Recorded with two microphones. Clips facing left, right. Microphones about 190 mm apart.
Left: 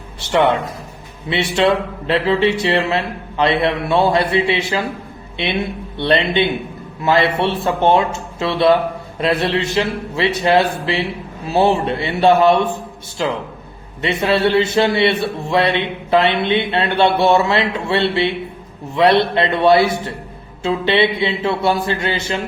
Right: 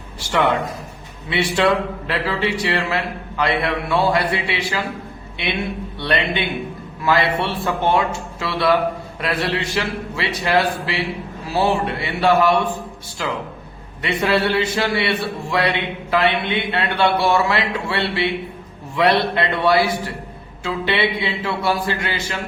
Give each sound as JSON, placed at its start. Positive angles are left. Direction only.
{"t": 0.2, "sound": "a man's voice", "side_deg": 25}
{"t": 6.0, "sound": "a man's voice", "side_deg": 25}